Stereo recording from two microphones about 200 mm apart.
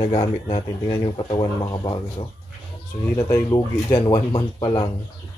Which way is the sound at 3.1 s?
20° left (ahead or behind).